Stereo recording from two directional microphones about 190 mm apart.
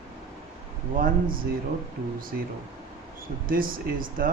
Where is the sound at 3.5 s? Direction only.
50° right (ahead or behind).